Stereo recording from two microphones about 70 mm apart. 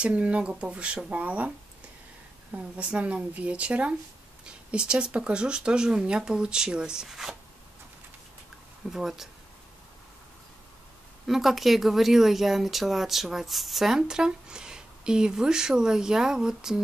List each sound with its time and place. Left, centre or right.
0.0 s speech: centre
2.5 s speech: centre
8.9 s a woman's voice: centre
11.2 s a woman's voice: centre